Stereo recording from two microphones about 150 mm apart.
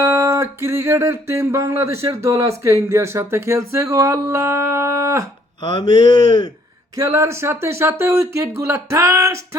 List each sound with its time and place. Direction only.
0.0 s music: 20° right (ahead or behind)
5.6 s speech: 30° left (ahead or behind)
6.9 s music: 20° right (ahead or behind)